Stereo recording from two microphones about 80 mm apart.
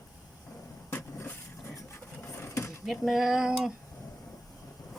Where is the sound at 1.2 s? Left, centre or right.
Left.